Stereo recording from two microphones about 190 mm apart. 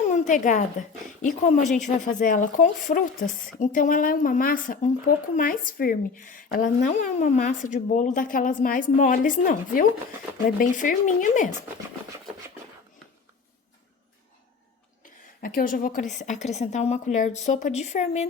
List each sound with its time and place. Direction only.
0.0 s speech: 40° left (ahead or behind)
15.0 s a woman's voice: 50° left (ahead or behind)